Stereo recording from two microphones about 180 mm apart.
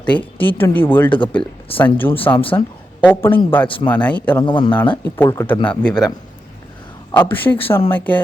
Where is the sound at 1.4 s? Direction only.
25° left (ahead or behind).